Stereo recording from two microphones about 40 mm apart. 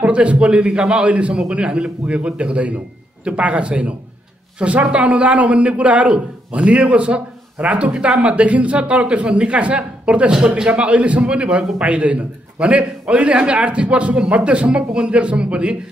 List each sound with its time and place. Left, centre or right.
0.0 s a man's voice: right
1.0 s a man's voice: right